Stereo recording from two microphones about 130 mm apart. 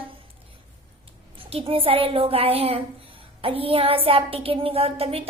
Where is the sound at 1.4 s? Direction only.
45° right (ahead or behind).